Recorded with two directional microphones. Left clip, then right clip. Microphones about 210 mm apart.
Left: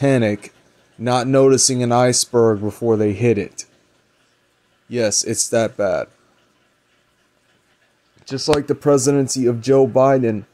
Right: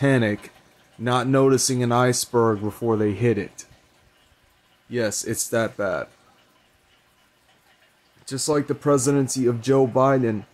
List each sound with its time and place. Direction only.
0.0 s speech: 20° left (ahead or behind)
4.8 s speech: 20° left (ahead or behind)
8.5 s speech: 25° left (ahead or behind)